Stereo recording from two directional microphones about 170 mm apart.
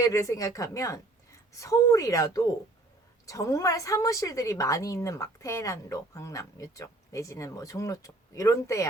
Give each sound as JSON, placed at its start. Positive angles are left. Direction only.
{"t": 0.0, "sound": "a woman's voice", "side_deg": 20}